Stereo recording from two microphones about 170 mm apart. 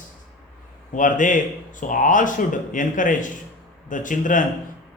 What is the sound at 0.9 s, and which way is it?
A man's voice, 50° left (ahead or behind).